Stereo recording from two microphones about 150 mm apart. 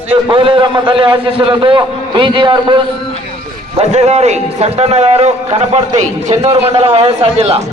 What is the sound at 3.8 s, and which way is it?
A man's voice, 45° right (ahead or behind).